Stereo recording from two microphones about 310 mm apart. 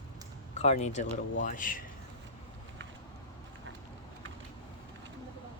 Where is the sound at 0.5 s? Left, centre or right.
Left.